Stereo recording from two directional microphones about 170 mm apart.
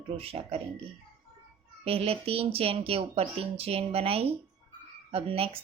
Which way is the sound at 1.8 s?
35° right (ahead or behind).